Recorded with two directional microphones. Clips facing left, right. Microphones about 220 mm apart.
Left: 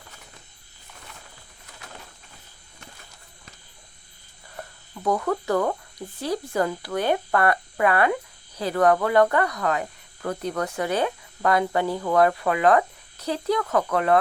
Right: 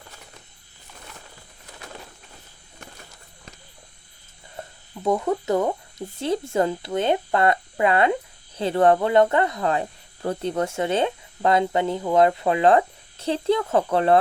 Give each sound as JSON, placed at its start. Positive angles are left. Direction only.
{"t": 4.5, "sound": "speech", "side_deg": -25}